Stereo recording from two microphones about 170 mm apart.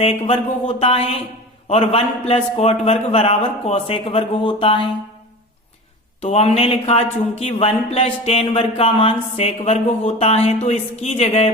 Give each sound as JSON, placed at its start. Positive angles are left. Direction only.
{"t": 0.0, "sound": "speech", "side_deg": 35}
{"t": 6.2, "sound": "speech", "side_deg": 40}